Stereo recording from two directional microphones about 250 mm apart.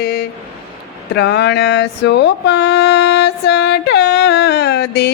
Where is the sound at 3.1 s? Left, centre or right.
Left.